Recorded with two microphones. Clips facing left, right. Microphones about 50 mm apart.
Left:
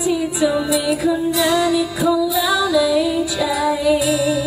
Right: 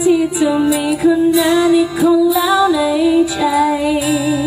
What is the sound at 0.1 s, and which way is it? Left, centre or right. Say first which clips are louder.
Music: right 4 dB; right.